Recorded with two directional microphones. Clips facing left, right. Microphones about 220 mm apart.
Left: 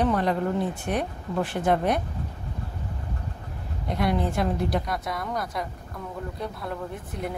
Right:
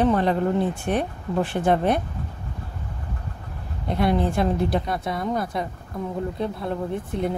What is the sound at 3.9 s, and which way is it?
Speech, 30° right (ahead or behind).